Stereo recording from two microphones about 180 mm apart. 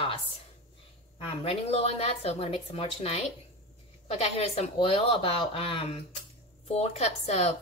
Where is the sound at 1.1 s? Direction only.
30° left (ahead or behind).